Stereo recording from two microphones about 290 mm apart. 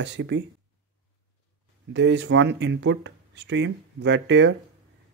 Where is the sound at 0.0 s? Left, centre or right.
Right.